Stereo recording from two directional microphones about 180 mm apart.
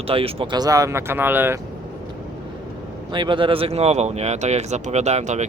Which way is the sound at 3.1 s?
25° right (ahead or behind).